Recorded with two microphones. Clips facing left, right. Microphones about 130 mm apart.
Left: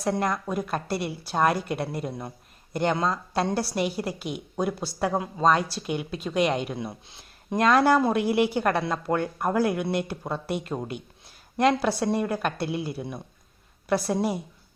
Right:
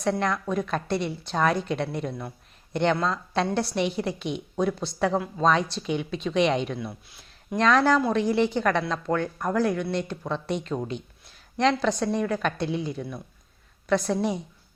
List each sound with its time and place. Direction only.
0.2 s a woman's voice: 5° left (ahead or behind)
6.7 s speech: 20° left (ahead or behind)